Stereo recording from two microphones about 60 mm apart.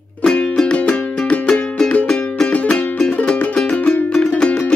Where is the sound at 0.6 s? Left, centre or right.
Centre.